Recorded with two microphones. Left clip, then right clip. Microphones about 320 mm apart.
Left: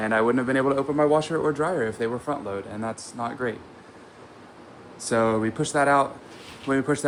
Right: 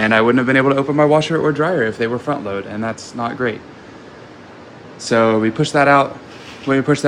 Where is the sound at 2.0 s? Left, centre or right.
Right.